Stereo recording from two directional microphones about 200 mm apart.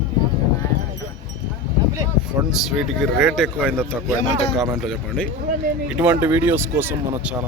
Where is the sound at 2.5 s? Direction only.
Centre (ahead or behind).